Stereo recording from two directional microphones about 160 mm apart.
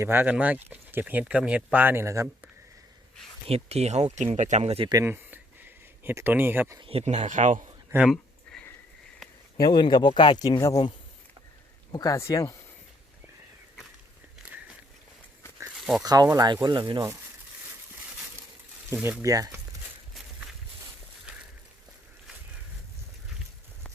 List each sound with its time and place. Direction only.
0.0 s speech: 15° right (ahead or behind)
3.4 s speech: 40° right (ahead or behind)
4.9 s a sound: 15° right (ahead or behind)
6.7 s speech: 35° right (ahead or behind)
7.9 s a sound: 5° right (ahead or behind)
9.6 s speech: 30° left (ahead or behind)
11.9 s speech: 25° left (ahead or behind)
15.6 s a sound: 5° right (ahead or behind)
16.0 s speech: 25° right (ahead or behind)
18.9 s speech: 5° right (ahead or behind)
19.2 s speech: 20° right (ahead or behind)